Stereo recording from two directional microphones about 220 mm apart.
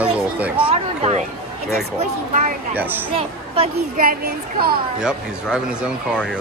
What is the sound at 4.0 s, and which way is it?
Speech, 40° right (ahead or behind).